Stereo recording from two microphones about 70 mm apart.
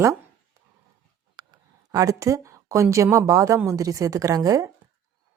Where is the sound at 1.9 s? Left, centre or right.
Right.